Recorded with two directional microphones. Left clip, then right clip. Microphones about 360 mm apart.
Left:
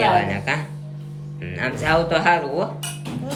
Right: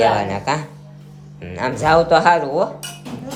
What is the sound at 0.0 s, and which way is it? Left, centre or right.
Speech, centre.